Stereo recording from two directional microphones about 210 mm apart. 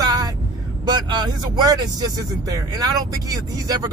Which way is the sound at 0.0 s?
20° right (ahead or behind).